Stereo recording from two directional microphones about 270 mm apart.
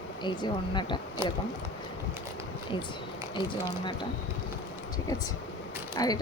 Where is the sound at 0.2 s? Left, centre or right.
Centre.